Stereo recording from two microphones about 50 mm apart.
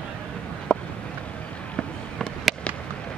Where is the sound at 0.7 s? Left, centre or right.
Centre.